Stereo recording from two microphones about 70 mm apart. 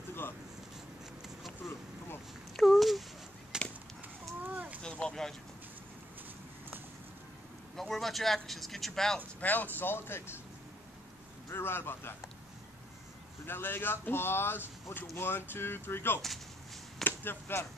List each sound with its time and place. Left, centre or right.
2.5 s a sound: centre
3.5 s chop: centre
4.4 s a sound: right
4.8 s vehicle: centre
7.7 s speech: centre
9.4 s speech: left
11.5 s speech: left
13.5 s speech: left
17.0 s chop: left